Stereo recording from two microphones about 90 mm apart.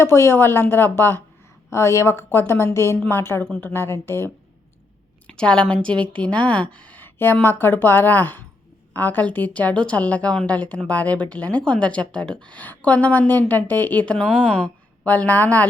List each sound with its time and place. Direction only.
0.0 s a woman's voice: 25° left (ahead or behind)
5.3 s a woman's voice: 10° left (ahead or behind)